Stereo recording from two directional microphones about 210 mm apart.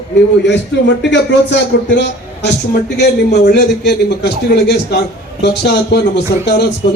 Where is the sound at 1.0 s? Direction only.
55° left (ahead or behind).